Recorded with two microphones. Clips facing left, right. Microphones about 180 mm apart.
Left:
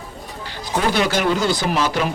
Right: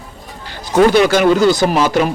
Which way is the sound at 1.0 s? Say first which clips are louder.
Right 8 dB; 55° right (ahead or behind).